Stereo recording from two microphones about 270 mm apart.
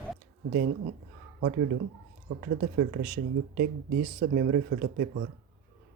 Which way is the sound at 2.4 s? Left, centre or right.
Right.